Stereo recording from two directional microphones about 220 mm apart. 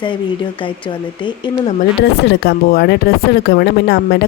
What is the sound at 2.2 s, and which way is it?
Speech, 50° left (ahead or behind).